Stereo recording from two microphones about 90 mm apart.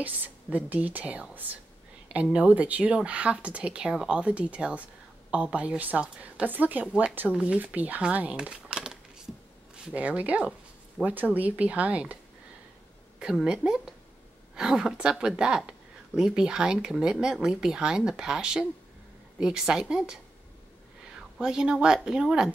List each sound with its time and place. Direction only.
0.0 s speech: 20° right (ahead or behind)
13.2 s speech: 10° right (ahead or behind)
21.2 s speech: 10° right (ahead or behind)